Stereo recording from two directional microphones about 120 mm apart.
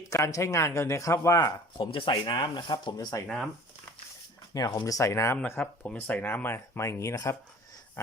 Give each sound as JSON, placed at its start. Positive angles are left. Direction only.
{"t": 0.1, "sound": "speech", "side_deg": 25}
{"t": 3.2, "sound": "speech", "side_deg": 0}
{"t": 4.5, "sound": "speech", "side_deg": 35}
{"t": 4.9, "sound": "speech", "side_deg": 25}